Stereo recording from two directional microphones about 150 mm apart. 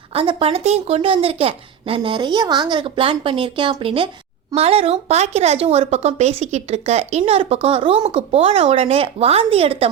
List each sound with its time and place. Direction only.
0.1 s speech: 40° right (ahead or behind)